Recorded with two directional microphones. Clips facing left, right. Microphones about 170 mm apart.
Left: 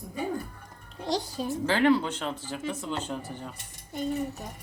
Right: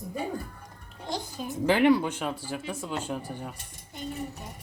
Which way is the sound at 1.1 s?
35° left (ahead or behind).